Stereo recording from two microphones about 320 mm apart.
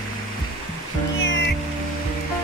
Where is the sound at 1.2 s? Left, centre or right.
Left.